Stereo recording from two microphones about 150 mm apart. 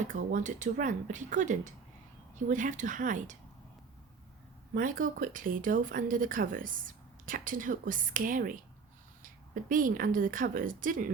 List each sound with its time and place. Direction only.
0.0 s speech: 60° right (ahead or behind)
4.7 s speech: 65° right (ahead or behind)